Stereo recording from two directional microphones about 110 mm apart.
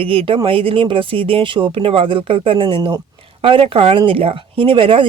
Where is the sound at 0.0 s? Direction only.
55° right (ahead or behind).